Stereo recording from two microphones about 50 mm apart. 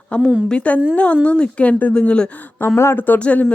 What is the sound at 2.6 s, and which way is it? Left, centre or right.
Speech, left.